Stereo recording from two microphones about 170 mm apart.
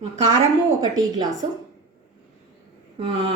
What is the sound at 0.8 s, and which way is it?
Speech, 20° right (ahead or behind).